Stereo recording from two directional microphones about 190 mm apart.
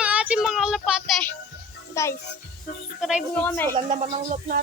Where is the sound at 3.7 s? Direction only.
35° right (ahead or behind).